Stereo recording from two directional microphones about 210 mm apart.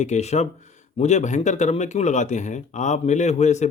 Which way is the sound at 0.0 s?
35° left (ahead or behind).